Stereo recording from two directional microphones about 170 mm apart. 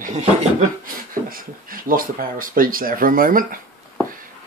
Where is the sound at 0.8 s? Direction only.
55° right (ahead or behind).